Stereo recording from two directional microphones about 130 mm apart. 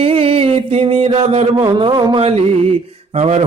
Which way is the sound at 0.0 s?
50° right (ahead or behind).